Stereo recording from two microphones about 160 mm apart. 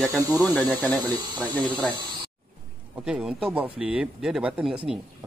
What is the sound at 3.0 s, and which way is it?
Speech, 5° right (ahead or behind).